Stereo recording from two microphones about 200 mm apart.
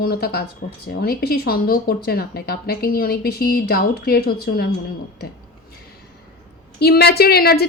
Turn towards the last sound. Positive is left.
turn(degrees=50)  # may be behind; listen again after turning